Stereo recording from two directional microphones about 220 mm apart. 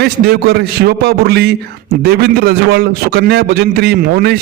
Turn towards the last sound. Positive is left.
turn(degrees=-45)  # may be behind; listen again after turning